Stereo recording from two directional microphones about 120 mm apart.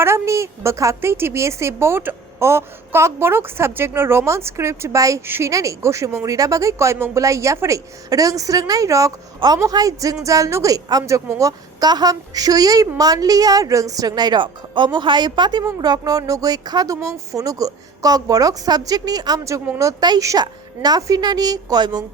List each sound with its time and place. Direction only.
0.0 s a woman's voice: 25° right (ahead or behind)
19.6 s speech: 15° right (ahead or behind)
19.9 s a woman's voice: 30° right (ahead or behind)